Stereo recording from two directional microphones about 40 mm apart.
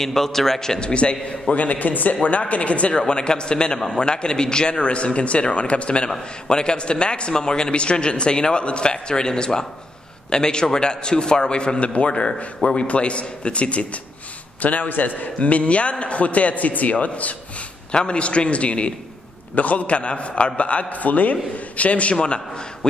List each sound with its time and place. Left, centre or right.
0.0 s a man's voice: centre
0.8 s a man's voice: left
2.9 s a man's voice: left
6.0 s a man's voice: centre
14.6 s a man's voice: left
15.3 s a man's voice: left
17.9 s a man's voice: left